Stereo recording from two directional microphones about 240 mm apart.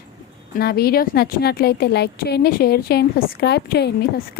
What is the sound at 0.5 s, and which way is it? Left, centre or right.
A woman's voice, left.